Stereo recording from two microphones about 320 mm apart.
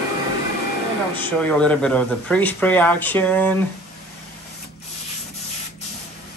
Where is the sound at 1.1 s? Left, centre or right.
Centre.